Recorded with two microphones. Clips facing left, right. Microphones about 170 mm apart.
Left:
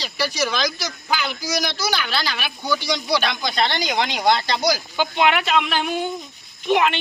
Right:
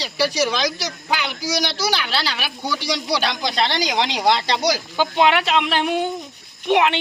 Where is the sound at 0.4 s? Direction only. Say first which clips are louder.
Right 1 dB; 30° right (ahead or behind).